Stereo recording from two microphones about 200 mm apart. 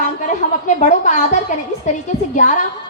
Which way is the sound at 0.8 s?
35° left (ahead or behind).